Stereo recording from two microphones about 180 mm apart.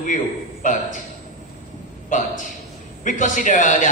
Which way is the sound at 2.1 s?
45° left (ahead or behind).